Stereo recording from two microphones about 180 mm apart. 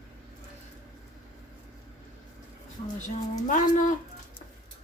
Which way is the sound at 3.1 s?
45° left (ahead or behind).